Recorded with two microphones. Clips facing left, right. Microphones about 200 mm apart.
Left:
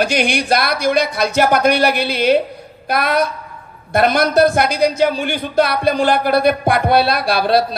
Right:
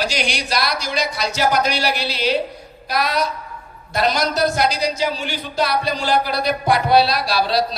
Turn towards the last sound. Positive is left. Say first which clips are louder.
# left 4 dB
turn(degrees=55)  # may be behind; listen again after turning